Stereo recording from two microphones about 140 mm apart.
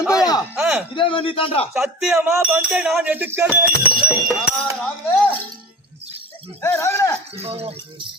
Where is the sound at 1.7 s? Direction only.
5° right (ahead or behind).